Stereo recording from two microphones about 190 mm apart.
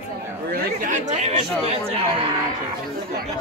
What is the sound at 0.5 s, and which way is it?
Speech, 45° right (ahead or behind).